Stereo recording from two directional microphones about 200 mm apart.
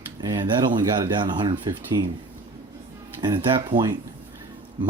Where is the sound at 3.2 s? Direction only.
25° right (ahead or behind).